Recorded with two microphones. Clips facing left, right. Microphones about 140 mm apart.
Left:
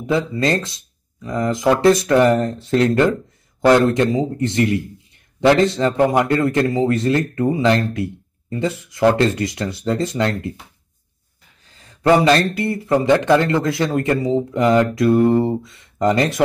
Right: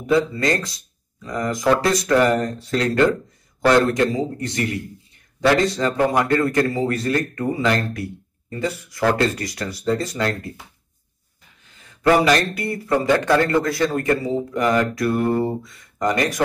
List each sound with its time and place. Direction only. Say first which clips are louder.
0.0 s a man's voice: even; 25° left (ahead or behind)
11.6 s a sound: left 2 dB; 35° left (ahead or behind)
12.1 s a man's voice: left 2 dB; 25° left (ahead or behind)